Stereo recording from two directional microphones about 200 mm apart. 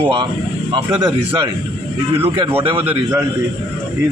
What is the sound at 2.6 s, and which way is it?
Speech, 25° right (ahead or behind).